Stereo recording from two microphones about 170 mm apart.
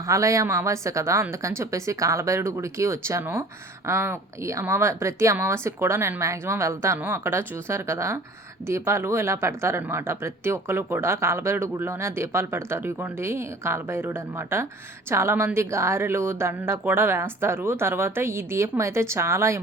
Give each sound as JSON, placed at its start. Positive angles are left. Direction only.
{"t": 0.0, "sound": "speech", "side_deg": -20}